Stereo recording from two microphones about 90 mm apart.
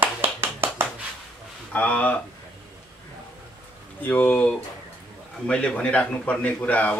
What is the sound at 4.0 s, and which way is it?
Speech, 20° left (ahead or behind).